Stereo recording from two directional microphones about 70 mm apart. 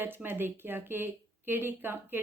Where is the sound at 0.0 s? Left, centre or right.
Right.